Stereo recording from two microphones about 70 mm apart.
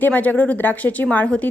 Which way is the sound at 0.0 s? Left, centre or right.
Left.